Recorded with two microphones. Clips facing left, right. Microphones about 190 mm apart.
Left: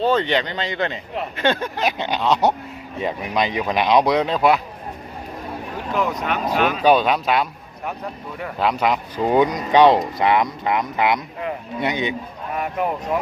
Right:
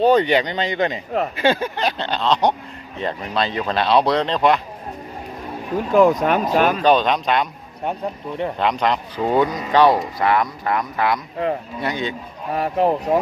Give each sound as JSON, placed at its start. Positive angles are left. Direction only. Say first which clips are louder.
{"t": 0.0, "sound": "speech", "louder": "right 4 dB", "side_deg": -15}
{"t": 1.7, "sound": "speech", "louder": "even", "side_deg": 10}
{"t": 5.9, "sound": "speech", "louder": "right 8 dB", "side_deg": -45}
{"t": 6.8, "sound": "speech", "louder": "even", "side_deg": 10}
{"t": 8.5, "sound": "a man's voice", "louder": "left 2 dB", "side_deg": 5}
{"t": 9.2, "sound": "speech", "louder": "left 1 dB", "side_deg": 15}
{"t": 12.5, "sound": "speech", "louder": "right 5 dB", "side_deg": -35}